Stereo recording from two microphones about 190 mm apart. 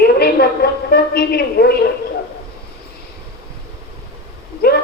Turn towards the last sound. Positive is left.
turn(degrees=55)  # may be behind; listen again after turning